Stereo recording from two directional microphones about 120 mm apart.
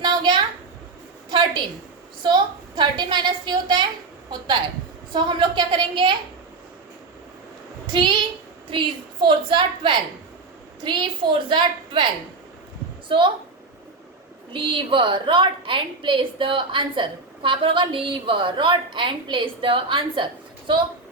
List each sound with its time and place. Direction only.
0.0 s a sound: 40° right (ahead or behind)
2.2 s a woman's voice: 40° right (ahead or behind)
5.1 s a woman's voice: 40° right (ahead or behind)
7.9 s a woman's voice: 40° right (ahead or behind)
13.1 s a woman's voice: 45° right (ahead or behind)
14.5 s a woman's voice: 45° right (ahead or behind)